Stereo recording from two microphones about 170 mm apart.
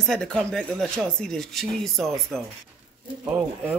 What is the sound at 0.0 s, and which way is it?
Speech, 5° left (ahead or behind).